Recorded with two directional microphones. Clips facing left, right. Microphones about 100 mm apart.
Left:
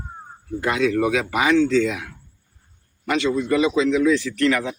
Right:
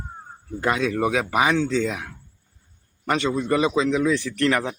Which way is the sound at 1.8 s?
35° right (ahead or behind).